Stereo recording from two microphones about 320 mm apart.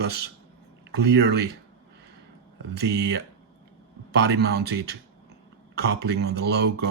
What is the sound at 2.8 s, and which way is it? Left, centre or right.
Speech, right.